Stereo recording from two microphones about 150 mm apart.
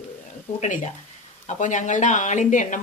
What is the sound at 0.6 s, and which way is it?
Speech, 55° left (ahead or behind).